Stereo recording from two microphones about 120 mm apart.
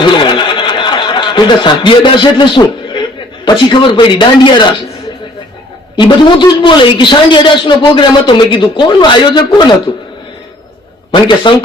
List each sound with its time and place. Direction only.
0.0 s a sound: 45° left (ahead or behind)
3.4 s a man's voice: 40° left (ahead or behind)
6.0 s a man's voice: 40° left (ahead or behind)
11.1 s speech: 45° left (ahead or behind)